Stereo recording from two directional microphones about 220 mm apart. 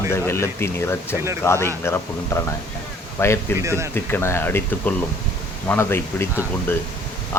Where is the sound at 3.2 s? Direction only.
10° left (ahead or behind).